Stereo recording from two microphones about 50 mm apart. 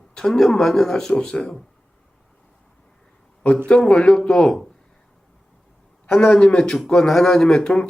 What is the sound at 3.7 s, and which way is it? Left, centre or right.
Speech, centre.